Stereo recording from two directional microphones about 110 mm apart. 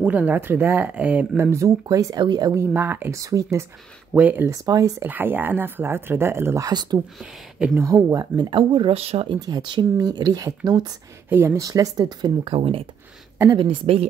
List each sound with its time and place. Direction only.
0.0 s speech: 15° right (ahead or behind); by 2.5 s 40° right (ahead or behind)
2.5 s speech: 20° right (ahead or behind)
3.2 s speech: 30° right (ahead or behind)
4.1 s speech: 15° right (ahead or behind)
4.5 s speech: 30° right (ahead or behind)
5.0 s speech: 20° right (ahead or behind)
6.7 s speech: 40° right (ahead or behind)
7.2 s speech: 5° right (ahead or behind)
7.7 s speech: 30° right (ahead or behind)
8.5 s speech: 55° right (ahead or behind)
9.3 s speech: 45° right (ahead or behind)
11.2 s speech: 20° right (ahead or behind)
11.6 s speech: 35° right (ahead or behind)
12.5 s speech: 60° right (ahead or behind)